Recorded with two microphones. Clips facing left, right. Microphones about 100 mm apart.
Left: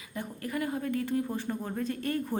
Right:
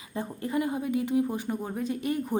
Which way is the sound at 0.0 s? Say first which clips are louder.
Right 4 dB; 25° right (ahead or behind).